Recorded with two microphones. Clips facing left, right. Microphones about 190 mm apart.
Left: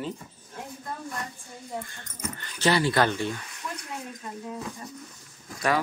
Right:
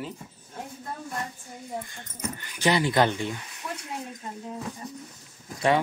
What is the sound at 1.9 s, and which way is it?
Speech, 15° right (ahead or behind).